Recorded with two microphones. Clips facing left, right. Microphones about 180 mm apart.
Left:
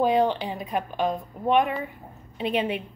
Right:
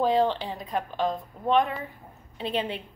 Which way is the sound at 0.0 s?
15° left (ahead or behind).